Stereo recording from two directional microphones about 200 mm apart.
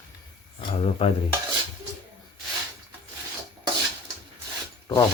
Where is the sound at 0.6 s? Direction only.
30° left (ahead or behind).